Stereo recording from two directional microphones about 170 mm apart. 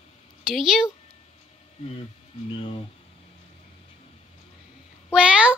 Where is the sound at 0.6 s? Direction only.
Centre (ahead or behind).